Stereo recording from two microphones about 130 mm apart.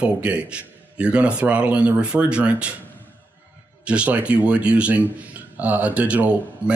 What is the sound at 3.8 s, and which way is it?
Speech, 10° right (ahead or behind).